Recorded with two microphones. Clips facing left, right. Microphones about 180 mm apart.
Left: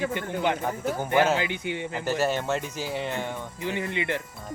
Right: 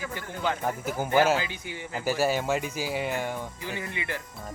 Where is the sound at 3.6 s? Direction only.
20° left (ahead or behind).